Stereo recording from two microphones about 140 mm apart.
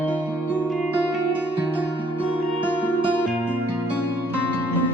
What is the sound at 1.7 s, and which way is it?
Music, 15° left (ahead or behind).